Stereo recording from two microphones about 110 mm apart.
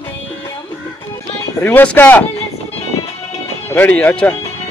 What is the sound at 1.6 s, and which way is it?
Speech, 15° left (ahead or behind).